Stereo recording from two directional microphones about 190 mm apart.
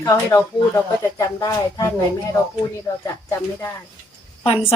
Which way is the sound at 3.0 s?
15° left (ahead or behind).